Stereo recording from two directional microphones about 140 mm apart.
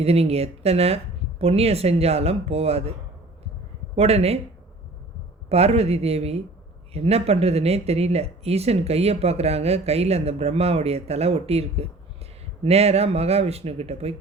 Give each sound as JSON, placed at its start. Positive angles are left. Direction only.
{"t": 0.0, "sound": "speech", "side_deg": -45}
{"t": 3.9, "sound": "speech", "side_deg": -45}
{"t": 5.5, "sound": "speech", "side_deg": -45}